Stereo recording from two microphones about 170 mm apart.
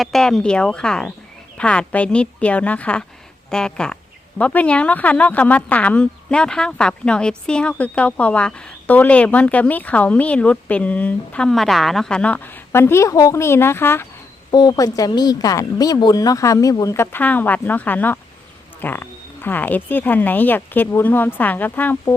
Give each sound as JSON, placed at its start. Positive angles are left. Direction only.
{"t": 0.0, "sound": "speech", "side_deg": 5}